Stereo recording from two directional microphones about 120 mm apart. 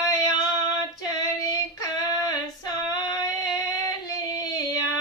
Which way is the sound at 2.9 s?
30° left (ahead or behind).